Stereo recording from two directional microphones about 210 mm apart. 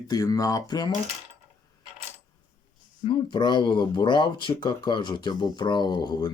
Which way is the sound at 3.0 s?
20° left (ahead or behind).